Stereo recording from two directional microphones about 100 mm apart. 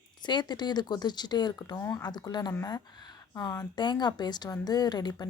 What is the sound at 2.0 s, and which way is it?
Speech, 45° left (ahead or behind).